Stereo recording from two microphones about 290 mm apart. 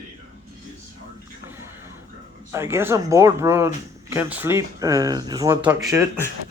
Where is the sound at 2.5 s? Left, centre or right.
Centre.